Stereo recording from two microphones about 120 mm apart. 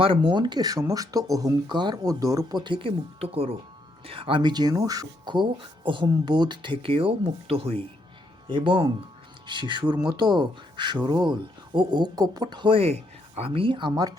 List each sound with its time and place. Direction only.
0.0 s speech: 45° right (ahead or behind)
8.4 s speech: 40° right (ahead or behind)